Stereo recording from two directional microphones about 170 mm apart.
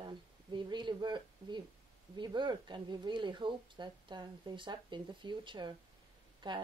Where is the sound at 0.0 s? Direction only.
25° right (ahead or behind).